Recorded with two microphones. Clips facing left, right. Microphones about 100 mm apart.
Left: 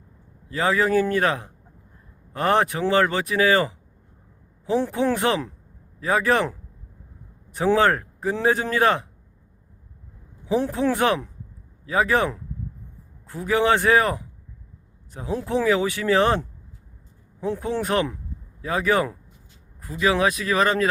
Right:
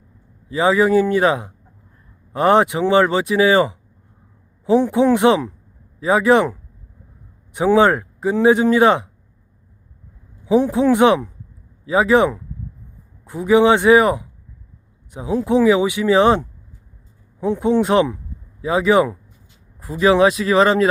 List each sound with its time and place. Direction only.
0.4 s speech: 15° right (ahead or behind)
10.4 s speech: 15° right (ahead or behind)
19.8 s speech: 30° right (ahead or behind)